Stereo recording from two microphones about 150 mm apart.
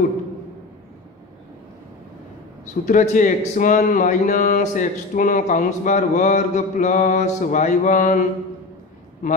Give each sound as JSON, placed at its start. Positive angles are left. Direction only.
{"t": 2.8, "sound": "speech", "side_deg": 55}